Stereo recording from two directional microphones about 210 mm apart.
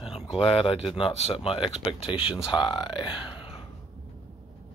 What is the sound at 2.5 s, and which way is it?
Speech, 20° left (ahead or behind).